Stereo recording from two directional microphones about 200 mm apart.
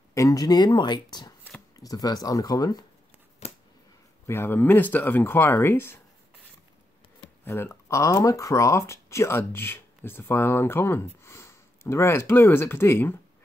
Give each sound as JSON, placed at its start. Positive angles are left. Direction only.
{"t": 0.1, "sound": "speech", "side_deg": 15}
{"t": 3.4, "sound": "a sound", "side_deg": 30}
{"t": 4.3, "sound": "speech", "side_deg": 10}
{"t": 7.4, "sound": "speech", "side_deg": 15}